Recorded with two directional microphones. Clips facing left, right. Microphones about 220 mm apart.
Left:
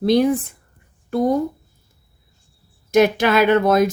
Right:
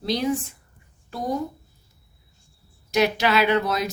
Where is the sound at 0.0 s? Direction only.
55° left (ahead or behind).